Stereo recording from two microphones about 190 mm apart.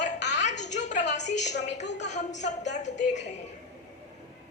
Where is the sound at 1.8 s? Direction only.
65° left (ahead or behind).